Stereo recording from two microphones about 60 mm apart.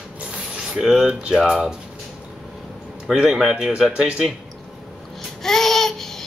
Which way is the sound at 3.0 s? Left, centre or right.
Centre.